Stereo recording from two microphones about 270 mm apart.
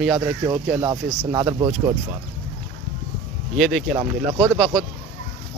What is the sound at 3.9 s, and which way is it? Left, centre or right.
Speech, centre.